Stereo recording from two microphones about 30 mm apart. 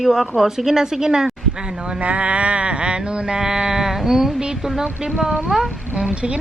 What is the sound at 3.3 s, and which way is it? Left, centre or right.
A woman's voice, centre.